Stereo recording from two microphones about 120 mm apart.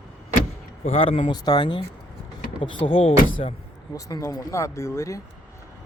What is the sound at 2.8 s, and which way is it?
Speech, 50° left (ahead or behind).